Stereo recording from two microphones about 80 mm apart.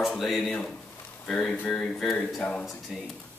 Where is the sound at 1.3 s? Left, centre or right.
Centre.